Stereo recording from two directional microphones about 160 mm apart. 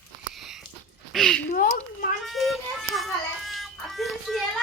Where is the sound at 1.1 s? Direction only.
5° left (ahead or behind).